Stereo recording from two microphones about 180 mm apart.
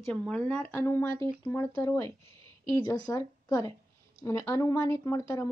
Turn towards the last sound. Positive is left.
turn(degrees=15)  # may be behind; listen again after turning